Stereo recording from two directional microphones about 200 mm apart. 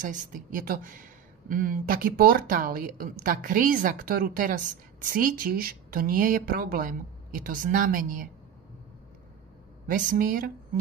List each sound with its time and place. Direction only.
0.0 s speech: 40° right (ahead or behind)
9.8 s speech: 40° right (ahead or behind)